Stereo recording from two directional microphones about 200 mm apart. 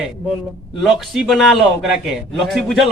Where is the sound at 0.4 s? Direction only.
Centre (ahead or behind).